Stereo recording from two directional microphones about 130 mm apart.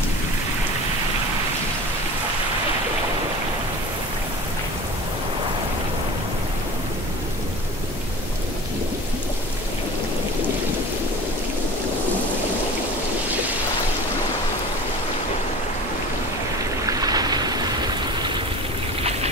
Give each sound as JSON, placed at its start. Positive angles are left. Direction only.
{"t": 16.8, "sound": "waves", "side_deg": -30}